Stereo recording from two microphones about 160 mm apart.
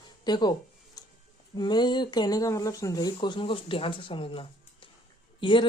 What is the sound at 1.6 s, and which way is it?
Speech, 25° left (ahead or behind).